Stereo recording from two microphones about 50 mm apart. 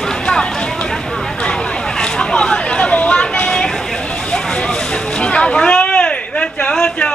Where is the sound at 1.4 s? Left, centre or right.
Centre.